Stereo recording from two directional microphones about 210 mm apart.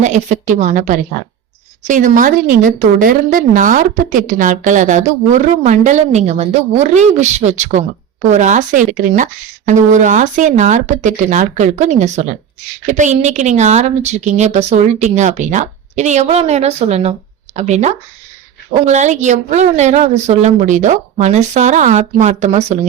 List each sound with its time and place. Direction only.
0.0 s speech: 35° right (ahead or behind)